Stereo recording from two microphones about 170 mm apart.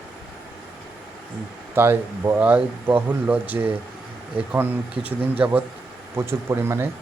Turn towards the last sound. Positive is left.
turn(degrees=-15)  # may be behind; listen again after turning